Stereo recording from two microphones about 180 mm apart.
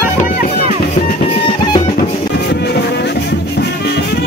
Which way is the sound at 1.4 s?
25° left (ahead or behind).